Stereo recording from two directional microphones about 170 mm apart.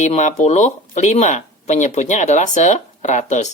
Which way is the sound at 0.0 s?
45° left (ahead or behind).